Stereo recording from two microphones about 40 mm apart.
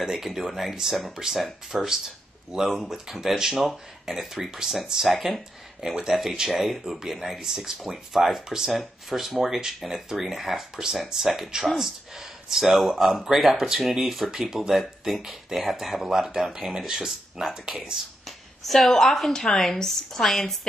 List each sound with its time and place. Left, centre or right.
0.0 s speech: centre
7.7 s speech: centre
18.7 s speech: centre